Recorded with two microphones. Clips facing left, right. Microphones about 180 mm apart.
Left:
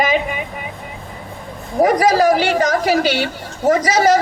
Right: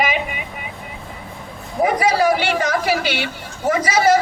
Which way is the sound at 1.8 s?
40° left (ahead or behind).